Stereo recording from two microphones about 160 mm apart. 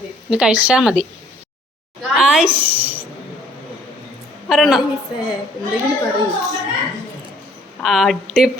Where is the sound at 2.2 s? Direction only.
5° right (ahead or behind).